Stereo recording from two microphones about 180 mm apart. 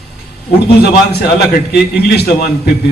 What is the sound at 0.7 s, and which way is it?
A man's voice, 60° left (ahead or behind).